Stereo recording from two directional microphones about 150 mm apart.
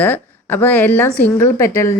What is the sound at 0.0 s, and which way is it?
A woman's voice, 15° left (ahead or behind).